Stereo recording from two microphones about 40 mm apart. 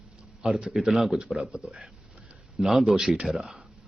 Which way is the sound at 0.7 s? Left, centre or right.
Centre.